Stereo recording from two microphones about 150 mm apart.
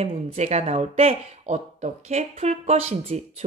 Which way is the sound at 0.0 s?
45° right (ahead or behind).